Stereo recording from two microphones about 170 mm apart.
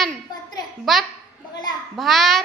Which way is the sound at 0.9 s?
Centre (ahead or behind).